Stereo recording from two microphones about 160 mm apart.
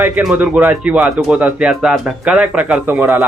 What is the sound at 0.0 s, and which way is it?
A man's voice, 5° right (ahead or behind).